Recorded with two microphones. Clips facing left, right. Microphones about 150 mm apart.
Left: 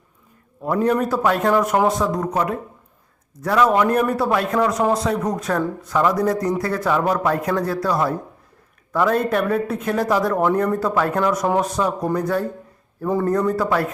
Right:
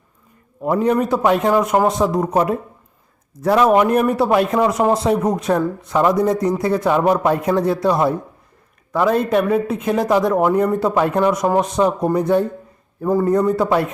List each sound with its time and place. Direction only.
0.6 s speech: 20° right (ahead or behind)
2.0 s speech: 25° right (ahead or behind)
3.7 s speech: 15° right (ahead or behind)
4.1 s speech: 25° right (ahead or behind)
8.9 s speech: 10° right (ahead or behind)
13.1 s a man's voice: 5° right (ahead or behind)
13.3 s speech: 15° right (ahead or behind)